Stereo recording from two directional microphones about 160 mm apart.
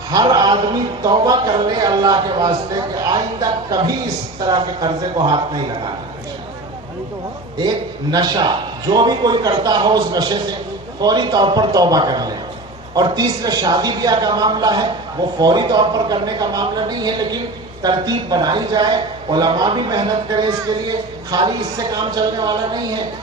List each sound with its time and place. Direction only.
0.1 s a man's voice: 25° right (ahead or behind)
8.1 s a man's voice: 25° right (ahead or behind)